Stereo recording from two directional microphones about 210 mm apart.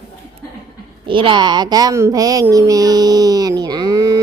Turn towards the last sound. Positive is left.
turn(degrees=-20)  # may be behind; listen again after turning